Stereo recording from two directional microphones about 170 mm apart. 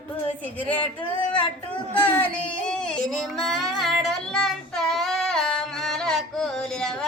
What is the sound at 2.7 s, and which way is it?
Child singing, 5° left (ahead or behind).